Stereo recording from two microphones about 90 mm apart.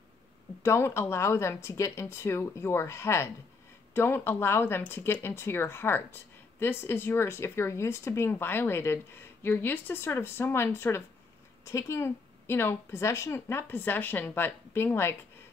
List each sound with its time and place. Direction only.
0.6 s speech: 30° left (ahead or behind)